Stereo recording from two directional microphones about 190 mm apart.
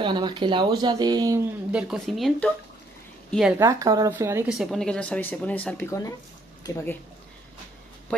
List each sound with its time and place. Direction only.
0.0 s speech: 25° right (ahead or behind)
1.7 s a woman's voice: 5° right (ahead or behind)
3.5 s a woman's voice: 15° right (ahead or behind); by 7.0 s 15° left (ahead or behind)